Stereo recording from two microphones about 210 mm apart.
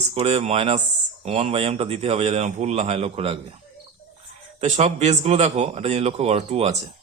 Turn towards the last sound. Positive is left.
turn(degrees=-30)  # may be behind; listen again after turning